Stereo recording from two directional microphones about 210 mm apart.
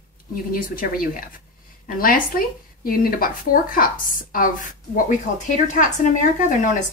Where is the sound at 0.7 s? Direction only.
40° left (ahead or behind).